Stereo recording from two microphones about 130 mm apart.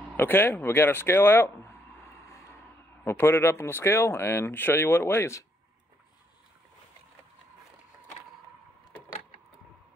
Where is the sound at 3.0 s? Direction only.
20° left (ahead or behind).